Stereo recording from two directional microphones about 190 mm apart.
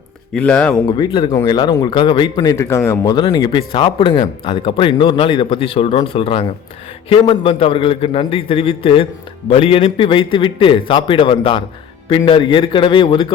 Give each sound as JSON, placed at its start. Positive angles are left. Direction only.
{"t": 0.3, "sound": "speech", "side_deg": 5}
{"t": 0.9, "sound": "speech", "side_deg": 25}